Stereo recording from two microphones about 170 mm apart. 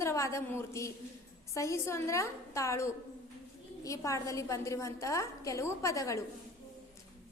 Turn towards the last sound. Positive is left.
turn(degrees=20)  # may be behind; listen again after turning